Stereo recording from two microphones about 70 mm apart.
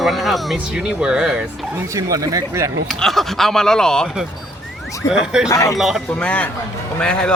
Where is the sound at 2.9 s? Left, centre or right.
Centre.